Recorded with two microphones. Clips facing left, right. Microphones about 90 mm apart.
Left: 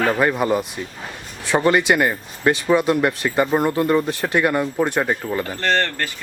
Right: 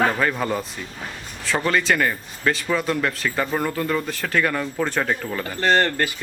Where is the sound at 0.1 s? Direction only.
15° left (ahead or behind).